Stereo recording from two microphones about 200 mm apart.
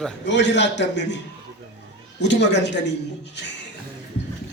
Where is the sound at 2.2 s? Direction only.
60° left (ahead or behind).